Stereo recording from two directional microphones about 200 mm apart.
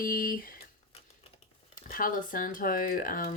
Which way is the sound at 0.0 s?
45° left (ahead or behind).